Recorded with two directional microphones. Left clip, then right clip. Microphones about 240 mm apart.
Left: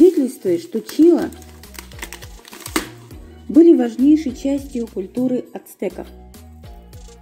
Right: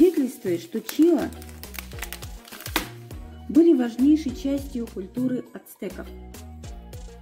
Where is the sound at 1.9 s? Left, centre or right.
Centre.